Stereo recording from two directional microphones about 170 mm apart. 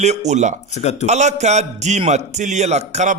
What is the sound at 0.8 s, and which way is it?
Speech, 40° left (ahead or behind).